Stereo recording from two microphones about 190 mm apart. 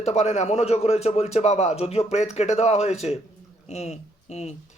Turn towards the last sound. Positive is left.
turn(degrees=35)  # may be behind; listen again after turning